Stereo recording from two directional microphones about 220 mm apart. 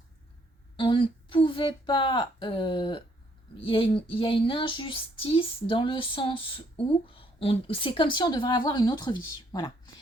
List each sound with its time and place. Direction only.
0.8 s speech: 20° left (ahead or behind)